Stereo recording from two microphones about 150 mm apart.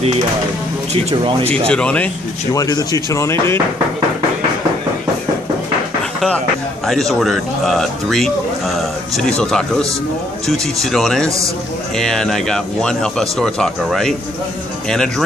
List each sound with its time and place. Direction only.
1.7 s speech: 5° left (ahead or behind)
2.5 s speech: 25° left (ahead or behind)
6.9 s speech: centre (ahead or behind)
11.2 s a man's voice: 20° right (ahead or behind)
12.0 s speech: 5° left (ahead or behind)